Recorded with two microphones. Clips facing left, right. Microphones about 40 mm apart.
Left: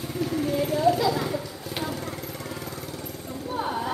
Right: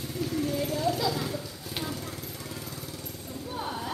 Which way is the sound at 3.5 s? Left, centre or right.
Centre.